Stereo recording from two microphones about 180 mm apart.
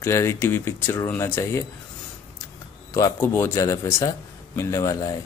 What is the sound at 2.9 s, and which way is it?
Speech, 15° left (ahead or behind).